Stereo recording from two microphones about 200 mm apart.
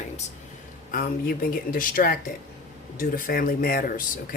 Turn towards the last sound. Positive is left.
turn(degrees=45)  # may be behind; listen again after turning